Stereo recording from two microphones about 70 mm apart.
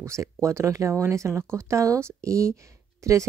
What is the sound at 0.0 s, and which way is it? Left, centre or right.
Speech, right.